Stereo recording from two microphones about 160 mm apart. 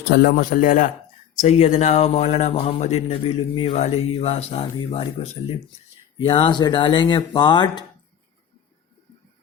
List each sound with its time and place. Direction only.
0.1 s a man's voice: 70° left (ahead or behind); by 0.9 s 55° left (ahead or behind)
1.4 s speech: 45° left (ahead or behind); by 7.9 s 30° left (ahead or behind)